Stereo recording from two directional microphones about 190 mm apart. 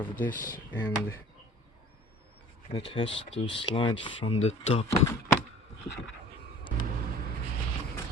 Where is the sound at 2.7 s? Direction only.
25° left (ahead or behind).